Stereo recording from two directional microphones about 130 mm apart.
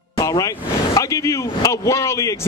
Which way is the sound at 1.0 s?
25° left (ahead or behind).